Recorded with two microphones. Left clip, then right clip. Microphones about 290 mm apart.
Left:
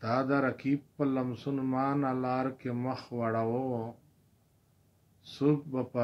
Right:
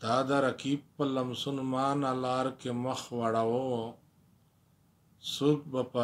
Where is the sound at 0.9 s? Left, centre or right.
Centre.